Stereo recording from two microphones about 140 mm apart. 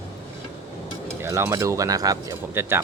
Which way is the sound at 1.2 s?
20° right (ahead or behind).